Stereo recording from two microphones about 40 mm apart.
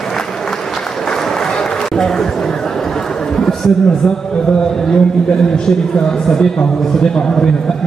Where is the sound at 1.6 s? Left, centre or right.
Centre.